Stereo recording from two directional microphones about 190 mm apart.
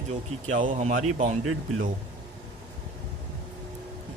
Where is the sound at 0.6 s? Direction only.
40° right (ahead or behind).